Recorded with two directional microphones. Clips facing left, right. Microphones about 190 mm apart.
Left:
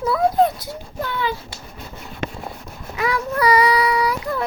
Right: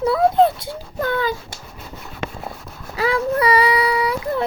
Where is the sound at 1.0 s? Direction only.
45° right (ahead or behind).